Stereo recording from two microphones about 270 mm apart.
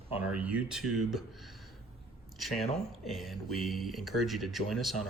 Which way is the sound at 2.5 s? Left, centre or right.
Left.